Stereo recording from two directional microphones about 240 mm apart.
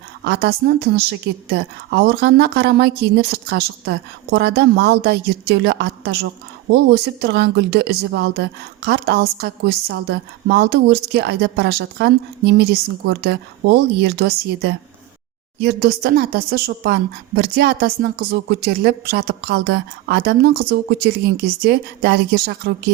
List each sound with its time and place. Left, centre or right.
1.5 s a woman's voice: right